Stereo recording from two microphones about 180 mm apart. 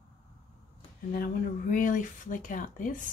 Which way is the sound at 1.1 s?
50° left (ahead or behind).